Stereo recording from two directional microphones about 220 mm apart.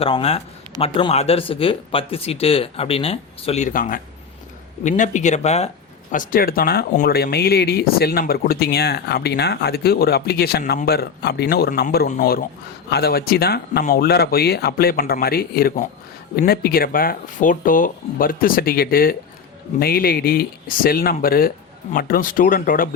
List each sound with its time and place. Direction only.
0.0 s speech: 25° left (ahead or behind)